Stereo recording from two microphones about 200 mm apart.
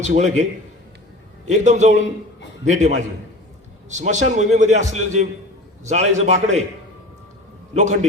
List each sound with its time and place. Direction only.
0.0 s a man's voice: 35° right (ahead or behind)
1.5 s a man's voice: 35° right (ahead or behind)
7.7 s a man's voice: 35° right (ahead or behind)